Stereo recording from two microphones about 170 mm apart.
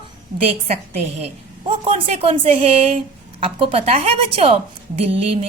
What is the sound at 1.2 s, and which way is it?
A woman's voice, 35° right (ahead or behind).